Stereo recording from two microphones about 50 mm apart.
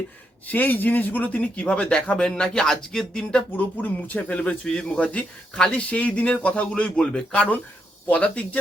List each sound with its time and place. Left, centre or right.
0.4 s speech: left; by 3.4 s centre
3.5 s speech: left; by 5.7 s centre
5.7 s speech: left